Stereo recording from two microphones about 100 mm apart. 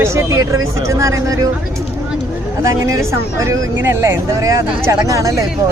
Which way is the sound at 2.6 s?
30° right (ahead or behind).